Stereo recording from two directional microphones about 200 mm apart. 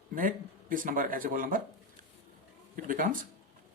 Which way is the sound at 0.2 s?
45° right (ahead or behind).